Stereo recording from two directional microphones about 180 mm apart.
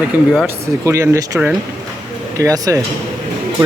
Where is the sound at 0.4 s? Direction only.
15° right (ahead or behind).